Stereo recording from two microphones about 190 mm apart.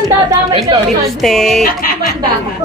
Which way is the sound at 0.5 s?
30° right (ahead or behind).